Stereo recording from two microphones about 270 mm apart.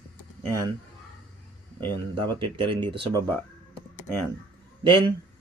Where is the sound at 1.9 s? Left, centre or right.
Centre.